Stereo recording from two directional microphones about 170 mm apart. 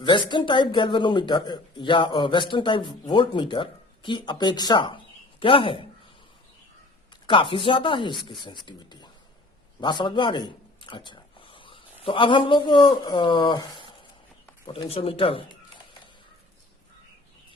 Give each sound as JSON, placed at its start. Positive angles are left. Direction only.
{"t": 0.0, "sound": "speech", "side_deg": 30}
{"t": 7.3, "sound": "speech", "side_deg": 30}